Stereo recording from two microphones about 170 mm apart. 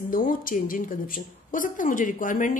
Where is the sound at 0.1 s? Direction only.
55° left (ahead or behind).